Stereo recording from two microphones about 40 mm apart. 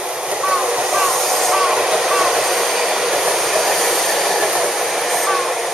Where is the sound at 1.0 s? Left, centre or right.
Centre.